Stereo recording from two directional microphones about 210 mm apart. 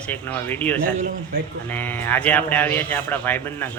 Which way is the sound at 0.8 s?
40° right (ahead or behind).